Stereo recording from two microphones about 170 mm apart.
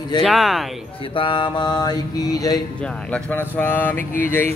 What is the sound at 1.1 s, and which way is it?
Mantra, 30° left (ahead or behind).